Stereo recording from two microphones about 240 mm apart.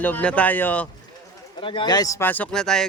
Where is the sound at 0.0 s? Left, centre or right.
Centre.